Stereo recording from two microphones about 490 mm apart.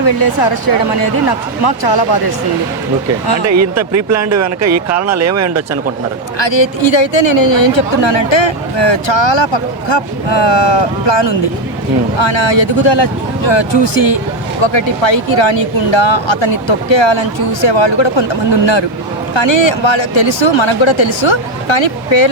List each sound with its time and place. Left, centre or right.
0.0 s speech: left
3.4 s speech: right
6.4 s speech: left
14.6 s speech: left